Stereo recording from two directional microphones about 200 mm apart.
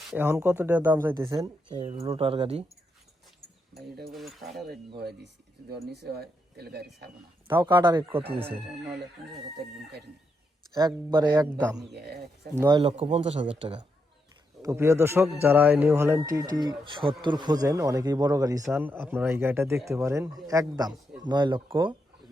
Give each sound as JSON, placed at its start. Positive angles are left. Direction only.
{"t": 0.1, "sound": "a man's voice", "side_deg": -10}
{"t": 1.8, "sound": "speech", "side_deg": -30}
{"t": 4.1, "sound": "speech", "side_deg": 0}
{"t": 4.9, "sound": "speech", "side_deg": -55}
{"t": 7.5, "sound": "speech", "side_deg": -20}
{"t": 10.8, "sound": "speech", "side_deg": -20}
{"t": 11.9, "sound": "speech", "side_deg": -55}
{"t": 12.5, "sound": "speech", "side_deg": -20}
{"t": 14.6, "sound": "a man's voice", "side_deg": -15}